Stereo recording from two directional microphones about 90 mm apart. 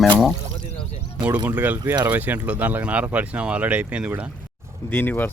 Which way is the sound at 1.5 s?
20° right (ahead or behind).